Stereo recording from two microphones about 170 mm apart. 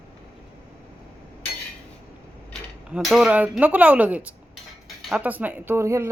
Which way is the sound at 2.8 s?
5° right (ahead or behind).